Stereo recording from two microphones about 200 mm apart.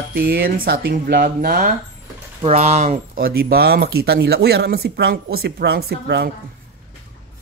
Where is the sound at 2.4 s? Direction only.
30° right (ahead or behind); by 6.2 s 55° right (ahead or behind).